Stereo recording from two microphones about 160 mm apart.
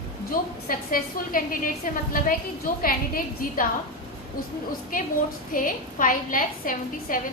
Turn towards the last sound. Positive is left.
turn(degrees=60)  # may be behind; listen again after turning